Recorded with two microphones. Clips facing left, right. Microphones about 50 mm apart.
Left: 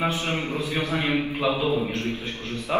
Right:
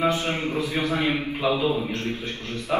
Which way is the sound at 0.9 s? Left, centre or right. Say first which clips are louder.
Even; left.